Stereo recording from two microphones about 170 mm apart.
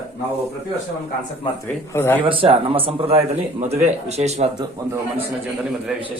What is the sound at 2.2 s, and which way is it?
Speech, 30° right (ahead or behind).